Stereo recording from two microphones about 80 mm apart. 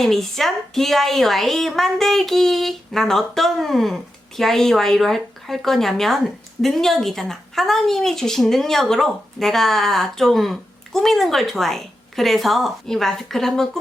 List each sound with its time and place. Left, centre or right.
0.0 s a woman's voice: centre